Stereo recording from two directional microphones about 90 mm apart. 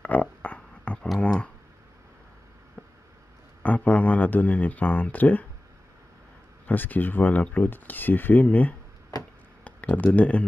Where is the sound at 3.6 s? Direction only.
15° left (ahead or behind).